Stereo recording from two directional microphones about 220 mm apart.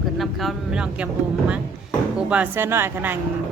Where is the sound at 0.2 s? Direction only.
Centre (ahead or behind).